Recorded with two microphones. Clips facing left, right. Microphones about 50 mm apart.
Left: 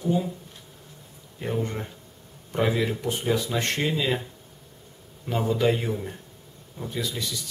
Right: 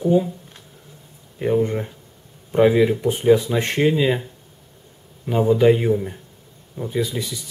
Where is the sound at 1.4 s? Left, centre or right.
Centre.